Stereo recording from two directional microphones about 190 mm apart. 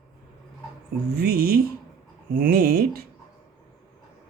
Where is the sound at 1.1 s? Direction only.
55° right (ahead or behind).